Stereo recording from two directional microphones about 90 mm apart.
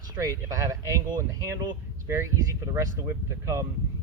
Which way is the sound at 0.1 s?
40° right (ahead or behind).